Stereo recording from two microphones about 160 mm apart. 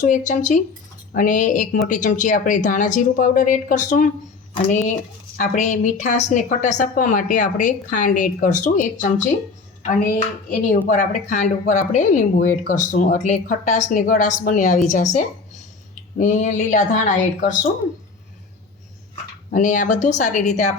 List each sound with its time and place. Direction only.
0.0 s a woman's voice: 50° left (ahead or behind)
10.8 s a woman's voice: 50° left (ahead or behind)
19.5 s a woman's voice: 55° left (ahead or behind)